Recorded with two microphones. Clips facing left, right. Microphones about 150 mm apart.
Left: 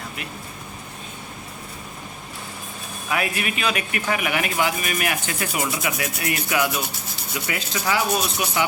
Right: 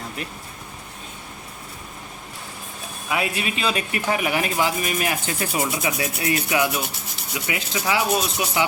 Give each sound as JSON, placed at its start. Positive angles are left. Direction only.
{"t": 3.1, "sound": "speech", "side_deg": -25}